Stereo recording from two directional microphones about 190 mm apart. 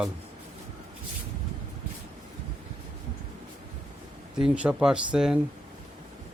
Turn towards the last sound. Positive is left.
turn(degrees=-5)  # may be behind; listen again after turning